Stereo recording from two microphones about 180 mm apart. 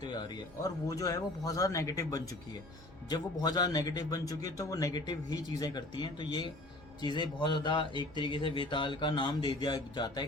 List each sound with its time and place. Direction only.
0.0 s a man's voice: 25° left (ahead or behind)